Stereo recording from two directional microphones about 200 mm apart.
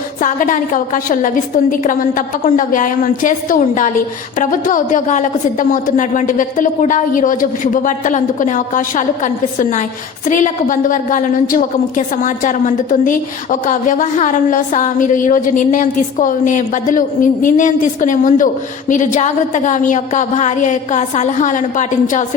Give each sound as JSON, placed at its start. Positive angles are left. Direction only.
{"t": 0.2, "sound": "a woman's voice", "side_deg": 40}